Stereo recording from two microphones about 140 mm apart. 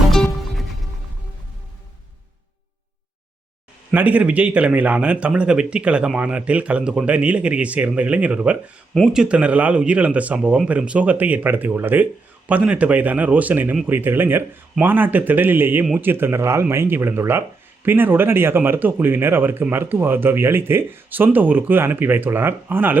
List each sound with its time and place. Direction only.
0.1 s music: centre (ahead or behind)
3.9 s speech: 10° right (ahead or behind)